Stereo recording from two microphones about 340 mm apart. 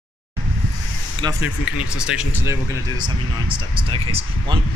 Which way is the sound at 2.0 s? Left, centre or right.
Centre.